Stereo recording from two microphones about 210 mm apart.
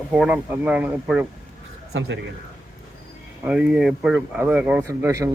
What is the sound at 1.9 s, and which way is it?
Speech, 60° right (ahead or behind).